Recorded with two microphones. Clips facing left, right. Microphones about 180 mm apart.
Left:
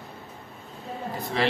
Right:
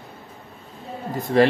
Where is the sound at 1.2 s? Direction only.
50° right (ahead or behind).